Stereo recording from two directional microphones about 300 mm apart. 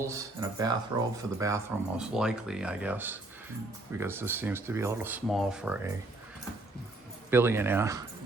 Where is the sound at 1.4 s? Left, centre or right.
Centre.